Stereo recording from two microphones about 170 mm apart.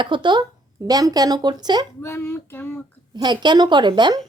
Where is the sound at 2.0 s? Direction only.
15° left (ahead or behind).